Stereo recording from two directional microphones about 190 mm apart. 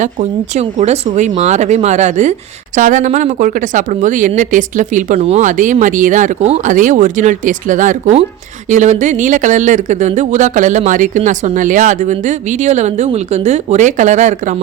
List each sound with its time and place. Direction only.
0.0 s speech: 40° right (ahead or behind)